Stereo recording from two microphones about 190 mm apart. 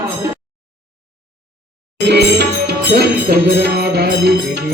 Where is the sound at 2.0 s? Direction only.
65° right (ahead or behind).